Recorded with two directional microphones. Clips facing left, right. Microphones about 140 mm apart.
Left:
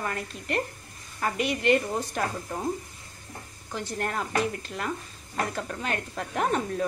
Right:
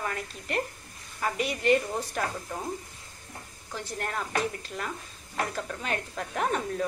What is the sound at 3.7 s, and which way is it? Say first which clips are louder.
Speech: left 3 dB; centre (ahead or behind).